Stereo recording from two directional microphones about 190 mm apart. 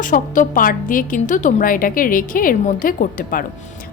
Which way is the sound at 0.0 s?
45° left (ahead or behind).